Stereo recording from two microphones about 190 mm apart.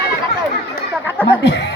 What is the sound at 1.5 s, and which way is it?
Speech, 65° left (ahead or behind).